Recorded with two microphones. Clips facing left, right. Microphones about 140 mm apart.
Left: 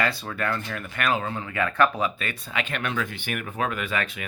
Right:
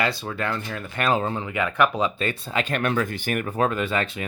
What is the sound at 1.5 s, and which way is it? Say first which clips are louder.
Speech: left 1 dB; 15° right (ahead or behind).